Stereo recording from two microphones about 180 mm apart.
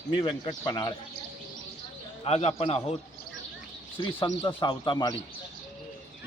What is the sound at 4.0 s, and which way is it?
Speech, 30° left (ahead or behind).